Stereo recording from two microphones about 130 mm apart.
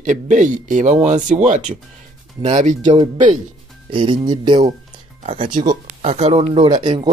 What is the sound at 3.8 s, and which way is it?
Speech, 40° right (ahead or behind).